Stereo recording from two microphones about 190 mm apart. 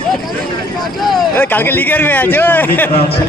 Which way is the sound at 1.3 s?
10° left (ahead or behind).